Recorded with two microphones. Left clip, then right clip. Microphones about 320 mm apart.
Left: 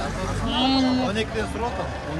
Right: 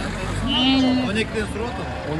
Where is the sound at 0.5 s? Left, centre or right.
Centre.